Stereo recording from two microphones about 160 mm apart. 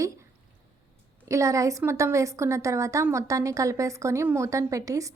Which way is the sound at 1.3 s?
20° right (ahead or behind).